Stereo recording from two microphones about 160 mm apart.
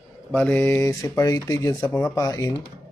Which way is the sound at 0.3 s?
10° left (ahead or behind).